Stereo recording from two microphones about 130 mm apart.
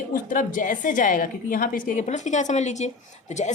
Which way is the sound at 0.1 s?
90° left.